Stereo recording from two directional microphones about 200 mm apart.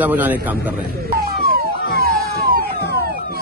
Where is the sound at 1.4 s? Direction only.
50° right (ahead or behind).